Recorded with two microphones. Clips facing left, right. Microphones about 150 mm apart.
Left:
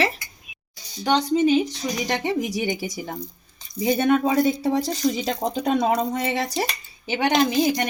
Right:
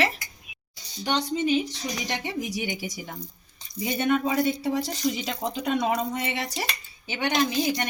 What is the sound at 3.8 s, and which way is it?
Speech, 35° left (ahead or behind).